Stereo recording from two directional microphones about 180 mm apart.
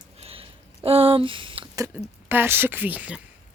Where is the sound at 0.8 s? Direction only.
30° right (ahead or behind).